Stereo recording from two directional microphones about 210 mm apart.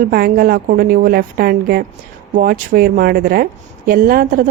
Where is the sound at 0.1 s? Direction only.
45° right (ahead or behind).